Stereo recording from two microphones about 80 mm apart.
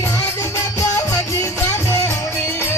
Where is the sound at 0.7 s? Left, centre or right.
Left.